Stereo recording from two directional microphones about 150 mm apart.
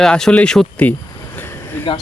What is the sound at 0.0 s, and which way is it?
Speech, 5° left (ahead or behind).